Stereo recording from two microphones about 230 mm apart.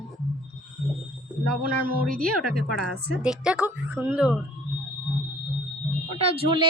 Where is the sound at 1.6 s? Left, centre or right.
Right.